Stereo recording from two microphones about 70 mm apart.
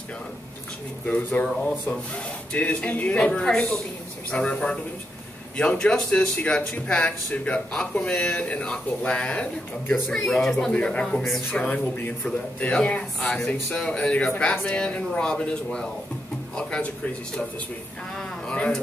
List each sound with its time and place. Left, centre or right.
1.0 s a man's voice: centre
13.2 s a man's voice: centre
18.1 s a man's voice: centre